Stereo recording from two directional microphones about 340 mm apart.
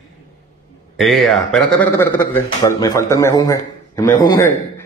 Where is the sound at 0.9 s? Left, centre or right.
Centre.